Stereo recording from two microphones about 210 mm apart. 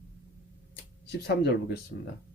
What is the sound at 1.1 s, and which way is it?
Speech, 50° left (ahead or behind).